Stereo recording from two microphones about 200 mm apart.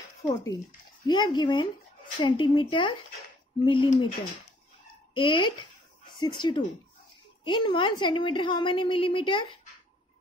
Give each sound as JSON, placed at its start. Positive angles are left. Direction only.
{"t": 0.3, "sound": "a woman's voice", "side_deg": 15}
{"t": 5.1, "sound": "a woman's voice", "side_deg": 25}